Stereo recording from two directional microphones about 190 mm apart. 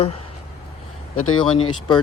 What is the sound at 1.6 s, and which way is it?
Speech, 25° left (ahead or behind).